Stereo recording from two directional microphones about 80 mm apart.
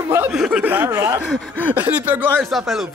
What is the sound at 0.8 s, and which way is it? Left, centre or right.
Speech, right.